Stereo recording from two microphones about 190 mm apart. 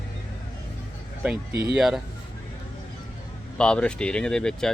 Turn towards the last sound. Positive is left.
turn(degrees=5)  # may be behind; listen again after turning